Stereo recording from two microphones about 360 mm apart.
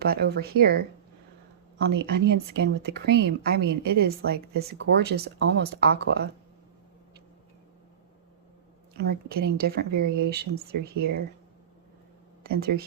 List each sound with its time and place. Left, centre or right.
0.0 s speech: right
2.0 s speech: right
9.0 s speech: right
12.4 s speech: right